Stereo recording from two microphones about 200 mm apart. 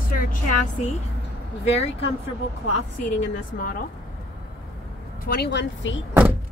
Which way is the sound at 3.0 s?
40° left (ahead or behind).